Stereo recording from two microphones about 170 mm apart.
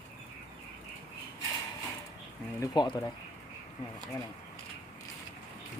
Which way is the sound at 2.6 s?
25° left (ahead or behind).